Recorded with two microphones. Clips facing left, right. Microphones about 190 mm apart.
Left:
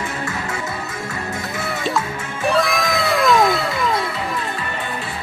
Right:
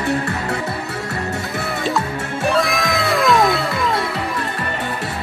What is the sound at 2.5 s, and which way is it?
Music, centre (ahead or behind).